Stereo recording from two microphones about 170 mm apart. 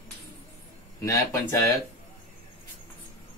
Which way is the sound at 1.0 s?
15° left (ahead or behind).